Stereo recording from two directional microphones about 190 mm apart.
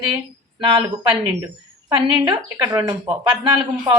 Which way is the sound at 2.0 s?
25° right (ahead or behind).